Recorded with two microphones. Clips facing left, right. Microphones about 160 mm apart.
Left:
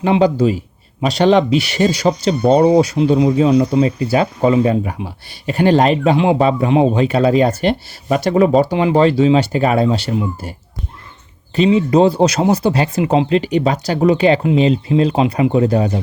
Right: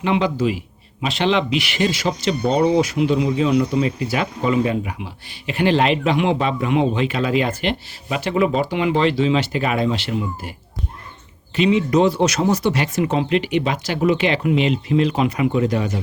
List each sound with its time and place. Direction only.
0.0 s speech: 35° left (ahead or behind)
11.5 s speech: 35° left (ahead or behind)